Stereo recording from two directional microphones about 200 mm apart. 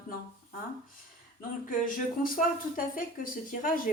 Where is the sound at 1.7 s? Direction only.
40° left (ahead or behind).